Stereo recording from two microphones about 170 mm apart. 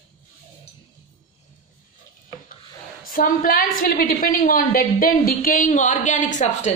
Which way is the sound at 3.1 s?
55° left (ahead or behind).